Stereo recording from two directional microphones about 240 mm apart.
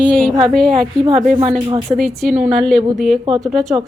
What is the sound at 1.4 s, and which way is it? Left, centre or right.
Speech, right.